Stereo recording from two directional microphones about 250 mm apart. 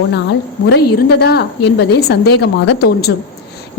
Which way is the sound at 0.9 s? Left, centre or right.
Left.